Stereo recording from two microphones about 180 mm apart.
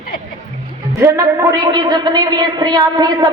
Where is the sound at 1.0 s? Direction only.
15° right (ahead or behind).